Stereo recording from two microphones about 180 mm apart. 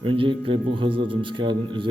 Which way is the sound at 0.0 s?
30° right (ahead or behind).